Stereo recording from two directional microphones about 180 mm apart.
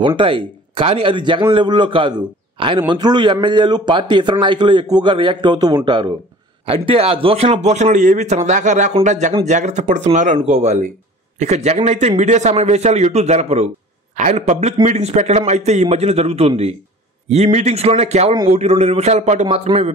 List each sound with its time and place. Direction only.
0.0 s a man's voice: 25° right (ahead or behind)